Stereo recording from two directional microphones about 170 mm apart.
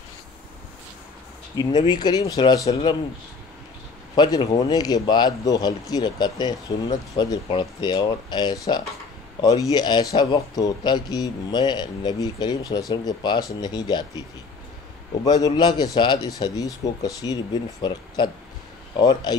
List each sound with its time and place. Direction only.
1.5 s speech: 25° left (ahead or behind)
4.1 s speech: 25° left (ahead or behind)
15.2 s speech: 20° left (ahead or behind)